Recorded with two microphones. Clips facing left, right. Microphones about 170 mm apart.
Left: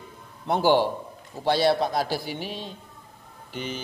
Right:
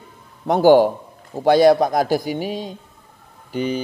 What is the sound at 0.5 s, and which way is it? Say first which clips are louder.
A man's voice: right 8 dB; 45° right (ahead or behind).